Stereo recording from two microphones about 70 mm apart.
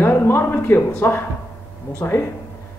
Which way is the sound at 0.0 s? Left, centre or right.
Left.